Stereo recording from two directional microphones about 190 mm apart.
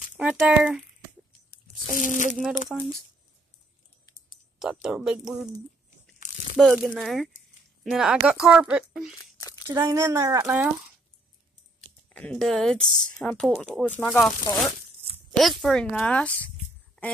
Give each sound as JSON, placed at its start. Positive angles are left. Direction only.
{"t": 0.2, "sound": "speech", "side_deg": -5}
{"t": 1.5, "sound": "speech", "side_deg": 40}
{"t": 2.3, "sound": "speech", "side_deg": 0}
{"t": 4.8, "sound": "speech", "side_deg": -5}
{"t": 6.5, "sound": "speech", "side_deg": -5}
{"t": 9.2, "sound": "a sound", "side_deg": 20}
{"t": 9.7, "sound": "speech", "side_deg": -15}
{"t": 12.1, "sound": "speech", "side_deg": 5}
{"t": 15.6, "sound": "speech", "side_deg": 5}